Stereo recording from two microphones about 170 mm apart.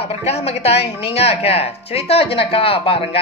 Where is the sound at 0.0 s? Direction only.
35° left (ahead or behind).